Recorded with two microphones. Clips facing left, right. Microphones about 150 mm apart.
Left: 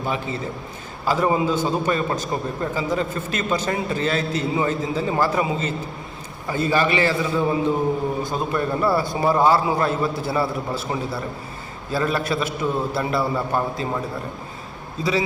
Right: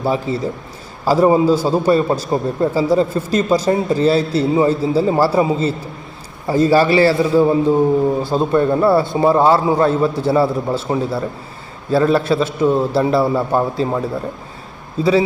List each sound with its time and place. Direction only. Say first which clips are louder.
0.0 s a man's voice: right 7 dB; 35° right (ahead or behind)